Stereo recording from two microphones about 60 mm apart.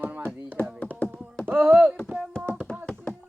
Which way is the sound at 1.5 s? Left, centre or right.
Right.